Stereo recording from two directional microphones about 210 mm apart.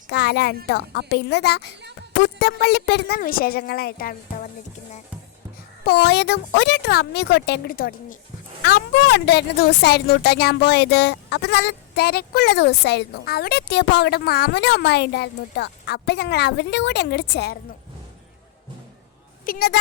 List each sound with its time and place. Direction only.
0.1 s a woman's voice: 50° left (ahead or behind)
5.8 s a woman's voice: 50° left (ahead or behind)
19.5 s a woman's voice: 50° left (ahead or behind)